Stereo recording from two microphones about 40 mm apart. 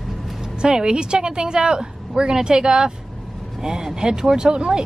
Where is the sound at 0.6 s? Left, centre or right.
Centre.